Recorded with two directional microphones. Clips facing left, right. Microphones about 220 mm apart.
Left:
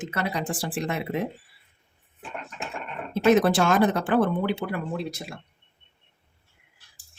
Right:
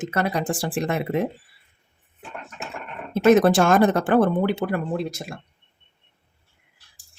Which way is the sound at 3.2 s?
50° right (ahead or behind).